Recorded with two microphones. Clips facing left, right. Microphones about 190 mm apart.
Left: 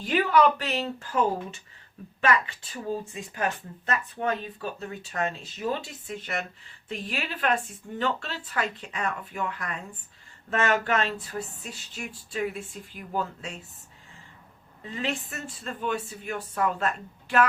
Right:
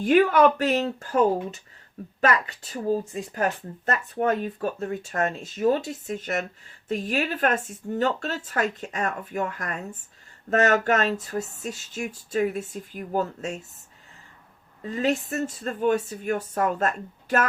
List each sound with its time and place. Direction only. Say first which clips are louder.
0.0 s speech: right 4 dB; 50° right (ahead or behind)
14.8 s speech: right 7 dB; 40° right (ahead or behind)